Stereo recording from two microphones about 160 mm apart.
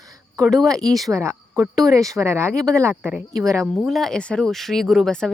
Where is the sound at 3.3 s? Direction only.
20° right (ahead or behind).